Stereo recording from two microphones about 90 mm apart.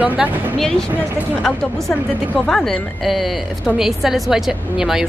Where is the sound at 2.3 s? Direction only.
5° left (ahead or behind).